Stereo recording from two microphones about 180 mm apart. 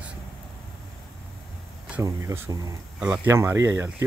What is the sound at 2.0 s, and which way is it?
Speech, 15° right (ahead or behind).